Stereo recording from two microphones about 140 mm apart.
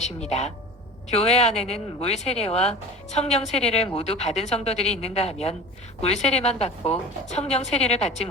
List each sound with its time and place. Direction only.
0.0 s speech: 50° left (ahead or behind)